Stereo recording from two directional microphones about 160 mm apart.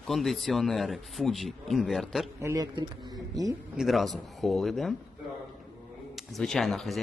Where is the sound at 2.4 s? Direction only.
20° right (ahead or behind).